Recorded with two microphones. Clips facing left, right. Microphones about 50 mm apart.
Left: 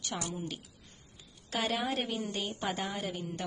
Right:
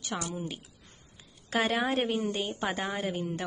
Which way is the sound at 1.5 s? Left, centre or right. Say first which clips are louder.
Right 5 dB; right.